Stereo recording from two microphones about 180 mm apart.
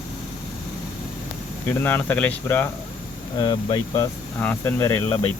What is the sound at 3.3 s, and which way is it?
Speech, 20° left (ahead or behind).